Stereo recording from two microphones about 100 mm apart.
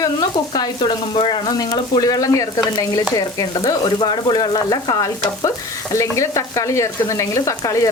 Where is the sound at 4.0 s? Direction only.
50° left (ahead or behind); by 6.0 s 35° left (ahead or behind).